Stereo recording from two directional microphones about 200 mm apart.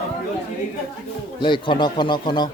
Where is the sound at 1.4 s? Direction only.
25° left (ahead or behind).